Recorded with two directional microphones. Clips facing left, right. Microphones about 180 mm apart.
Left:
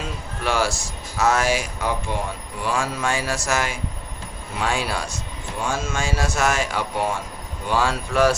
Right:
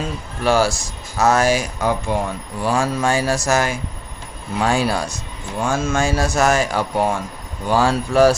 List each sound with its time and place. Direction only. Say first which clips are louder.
0.4 s speech: right 6 dB; 40° right (ahead or behind)